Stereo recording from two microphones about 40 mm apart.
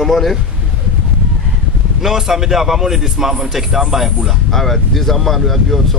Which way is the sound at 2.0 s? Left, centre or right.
Centre.